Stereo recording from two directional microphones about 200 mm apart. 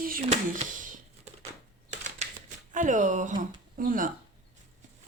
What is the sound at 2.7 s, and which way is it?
Speech, 40° right (ahead or behind).